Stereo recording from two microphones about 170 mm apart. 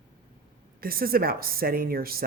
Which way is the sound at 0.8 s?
60° right (ahead or behind).